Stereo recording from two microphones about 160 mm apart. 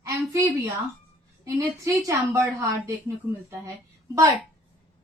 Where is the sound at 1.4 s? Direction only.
20° right (ahead or behind).